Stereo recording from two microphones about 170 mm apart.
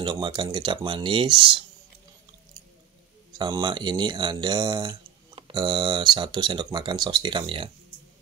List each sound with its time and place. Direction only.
0.0 s speech: 30° right (ahead or behind)
3.3 s speech: 25° right (ahead or behind)